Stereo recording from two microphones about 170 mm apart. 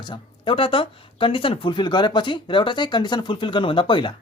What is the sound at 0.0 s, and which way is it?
Speech, 30° left (ahead or behind).